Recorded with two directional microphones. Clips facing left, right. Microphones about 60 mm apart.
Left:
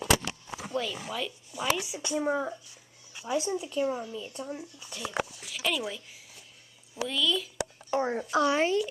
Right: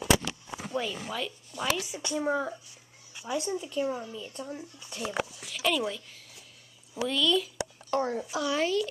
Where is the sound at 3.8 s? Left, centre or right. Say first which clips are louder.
Left 3 dB; left.